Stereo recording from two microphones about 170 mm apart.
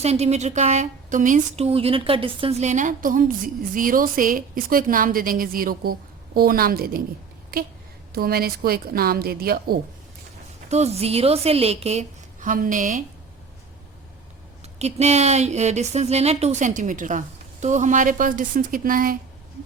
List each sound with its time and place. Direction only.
0.0 s a woman's voice: 40° right (ahead or behind); by 9.7 s 60° right (ahead or behind)
10.7 s a woman's voice: 40° right (ahead or behind)
14.6 s speech: 40° right (ahead or behind); by 19.1 s 55° right (ahead or behind)